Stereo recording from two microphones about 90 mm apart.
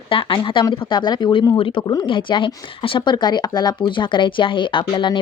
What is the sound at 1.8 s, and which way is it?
Speech, 50° left (ahead or behind).